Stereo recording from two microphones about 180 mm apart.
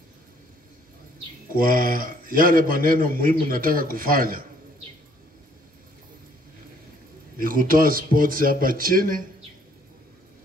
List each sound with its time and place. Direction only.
1.5 s a man's voice: 50° right (ahead or behind)
7.3 s a man's voice: 50° right (ahead or behind)